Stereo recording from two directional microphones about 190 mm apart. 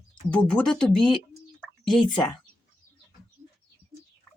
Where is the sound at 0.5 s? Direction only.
5° left (ahead or behind).